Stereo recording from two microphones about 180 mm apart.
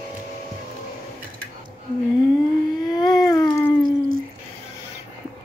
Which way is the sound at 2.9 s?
20° left (ahead or behind).